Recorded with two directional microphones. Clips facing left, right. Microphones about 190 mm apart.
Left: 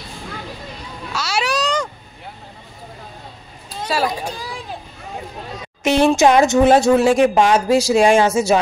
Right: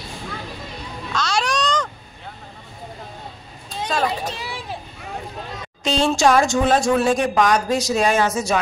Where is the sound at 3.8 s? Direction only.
10° left (ahead or behind).